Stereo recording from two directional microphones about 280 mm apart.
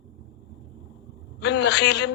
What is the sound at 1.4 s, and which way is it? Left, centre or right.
Speech, left.